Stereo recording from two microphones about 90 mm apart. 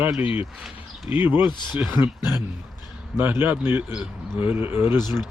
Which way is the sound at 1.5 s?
60° left (ahead or behind).